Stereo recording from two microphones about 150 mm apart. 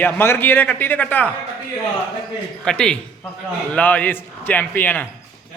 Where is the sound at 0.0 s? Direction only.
15° left (ahead or behind).